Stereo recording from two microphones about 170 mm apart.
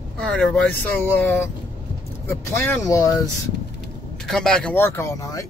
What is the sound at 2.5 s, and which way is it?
Speech, 15° left (ahead or behind).